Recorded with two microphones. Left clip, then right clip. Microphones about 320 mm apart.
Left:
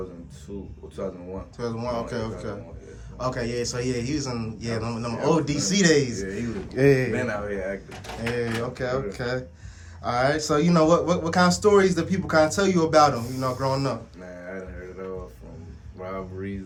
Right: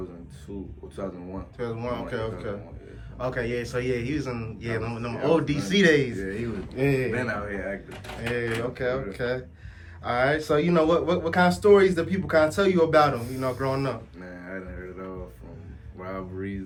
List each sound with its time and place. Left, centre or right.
1.0 s speech: centre
1.5 s a man's voice: centre
6.1 s speech: centre
6.7 s speech: left
7.1 s speech: centre
8.4 s speech: left
16.1 s speech: centre